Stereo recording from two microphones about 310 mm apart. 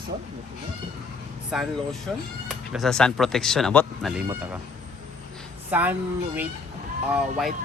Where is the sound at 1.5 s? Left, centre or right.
Centre.